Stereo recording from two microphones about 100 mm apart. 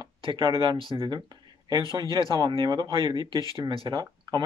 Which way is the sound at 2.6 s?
45° right (ahead or behind).